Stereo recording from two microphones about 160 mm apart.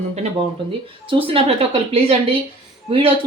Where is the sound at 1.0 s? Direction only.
35° right (ahead or behind).